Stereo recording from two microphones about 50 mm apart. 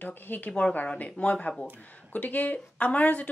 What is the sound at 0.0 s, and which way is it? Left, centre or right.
Speech, left.